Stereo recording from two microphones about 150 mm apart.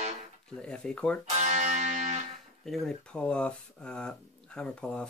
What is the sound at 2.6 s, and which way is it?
Speech, centre (ahead or behind).